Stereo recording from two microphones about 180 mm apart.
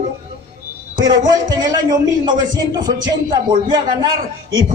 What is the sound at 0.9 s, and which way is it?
A man's voice, 25° right (ahead or behind).